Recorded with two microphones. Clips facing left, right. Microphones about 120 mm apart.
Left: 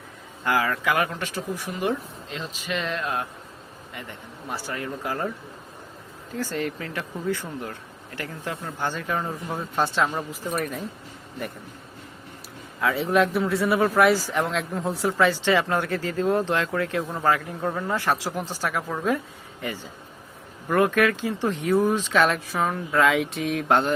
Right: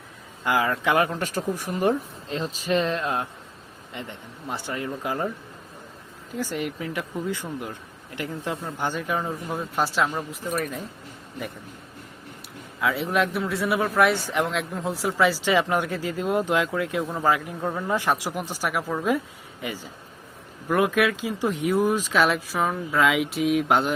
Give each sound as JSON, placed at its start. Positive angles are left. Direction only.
{"t": 0.4, "sound": "speech", "side_deg": -20}
{"t": 1.2, "sound": "speech", "side_deg": -45}
{"t": 6.3, "sound": "speech", "side_deg": -15}
{"t": 12.8, "sound": "a man's voice", "side_deg": 0}
{"t": 20.7, "sound": "a man's voice", "side_deg": -5}